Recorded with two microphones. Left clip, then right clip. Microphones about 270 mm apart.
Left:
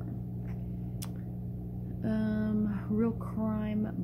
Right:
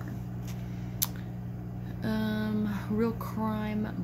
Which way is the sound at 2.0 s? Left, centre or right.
Centre.